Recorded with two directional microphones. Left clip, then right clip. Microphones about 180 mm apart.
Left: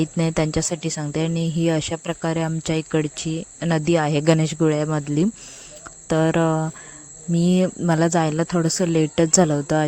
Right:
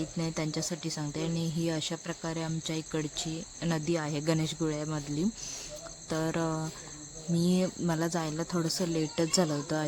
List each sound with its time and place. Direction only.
0.0 s speech: 40° left (ahead or behind)